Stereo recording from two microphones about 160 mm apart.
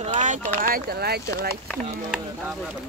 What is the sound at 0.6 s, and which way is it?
Speech, 70° right (ahead or behind).